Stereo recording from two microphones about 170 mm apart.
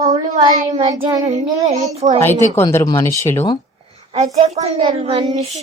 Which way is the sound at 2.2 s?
15° left (ahead or behind).